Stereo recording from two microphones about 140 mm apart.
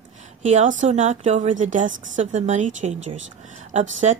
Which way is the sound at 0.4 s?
60° right (ahead or behind).